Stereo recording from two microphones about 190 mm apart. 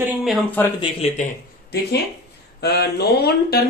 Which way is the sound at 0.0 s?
Centre (ahead or behind).